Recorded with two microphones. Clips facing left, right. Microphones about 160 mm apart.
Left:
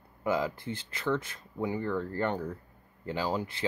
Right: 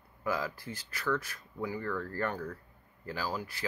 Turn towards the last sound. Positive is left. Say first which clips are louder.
# left 5 dB
turn(degrees=25)  # may be behind; listen again after turning